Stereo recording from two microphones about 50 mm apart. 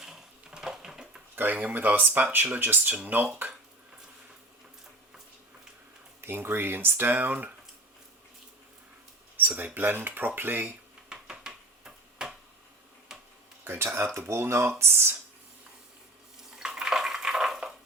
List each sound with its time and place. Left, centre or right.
0.0 s sewing machine: centre
1.5 s speech: right
6.2 s speech: right
9.4 s a sound: right
9.7 s speech: right
11.1 s a sound: centre
13.7 s speech: right
14.4 s speech: right
16.6 s bathtub: centre